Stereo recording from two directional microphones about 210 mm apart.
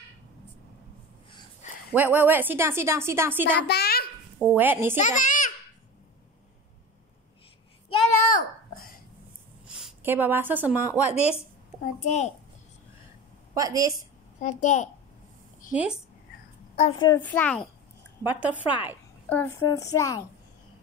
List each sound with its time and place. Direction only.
2.0 s a woman's voice: 10° right (ahead or behind)
3.6 s a sound: 50° left (ahead or behind)
4.4 s a woman's voice: 5° right (ahead or behind)
4.9 s a child's voice: 35° left (ahead or behind)
8.3 s babbling: 40° left (ahead or behind)
9.7 s speech: 5° right (ahead or behind)
11.8 s a child's voice: 35° left (ahead or behind)
13.6 s a woman's voice: 15° right (ahead or behind)
14.6 s a child's voice: 35° left (ahead or behind)
15.7 s a woman's voice: 5° right (ahead or behind)
16.7 s a woman's voice: 30° left (ahead or behind)
17.1 s a woman's voice: 5° left (ahead or behind)
18.2 s a woman's voice: 10° right (ahead or behind)
19.2 s a woman's voice: 10° left (ahead or behind)